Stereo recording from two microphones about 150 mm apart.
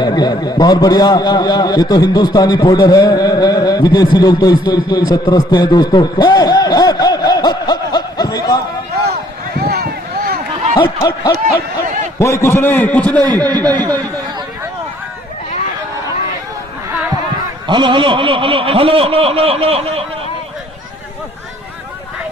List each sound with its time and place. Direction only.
0.0 s a man's voice: 25° left (ahead or behind)
9.6 s a sound: 90° right
10.8 s a man's voice: 30° left (ahead or behind); by 13.2 s 10° left (ahead or behind)
13.2 s a man's voice: 30° right (ahead or behind)
17.6 s speech: 35° right (ahead or behind)